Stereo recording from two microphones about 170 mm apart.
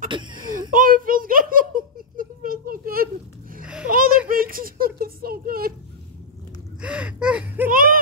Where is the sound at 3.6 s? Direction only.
5° right (ahead or behind).